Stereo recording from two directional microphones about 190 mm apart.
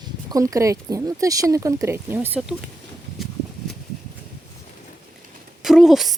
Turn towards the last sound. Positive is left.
turn(degrees=0)  # may be behind; listen again after turning